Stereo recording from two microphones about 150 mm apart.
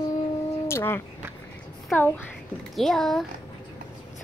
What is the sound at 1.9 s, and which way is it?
Speech, 15° left (ahead or behind).